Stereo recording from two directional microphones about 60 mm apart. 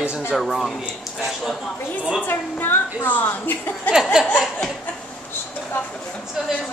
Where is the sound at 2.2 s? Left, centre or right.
Left.